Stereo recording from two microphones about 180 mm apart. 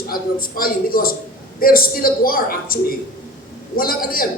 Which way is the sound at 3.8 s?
55° left (ahead or behind).